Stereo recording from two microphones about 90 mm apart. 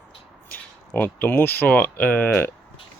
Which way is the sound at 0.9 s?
20° left (ahead or behind).